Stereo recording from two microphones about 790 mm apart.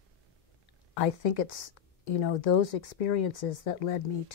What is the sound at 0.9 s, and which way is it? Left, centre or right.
Speech, left.